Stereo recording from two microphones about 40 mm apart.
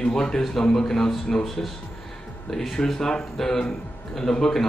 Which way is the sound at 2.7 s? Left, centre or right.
Centre.